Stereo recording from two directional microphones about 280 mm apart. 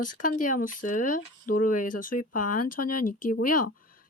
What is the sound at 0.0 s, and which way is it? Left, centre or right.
Speech, left.